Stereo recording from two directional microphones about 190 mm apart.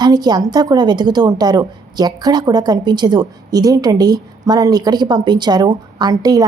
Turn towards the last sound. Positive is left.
turn(degrees=-20)  # may be behind; listen again after turning